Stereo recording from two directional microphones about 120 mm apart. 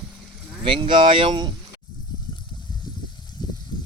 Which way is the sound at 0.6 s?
45° right (ahead or behind).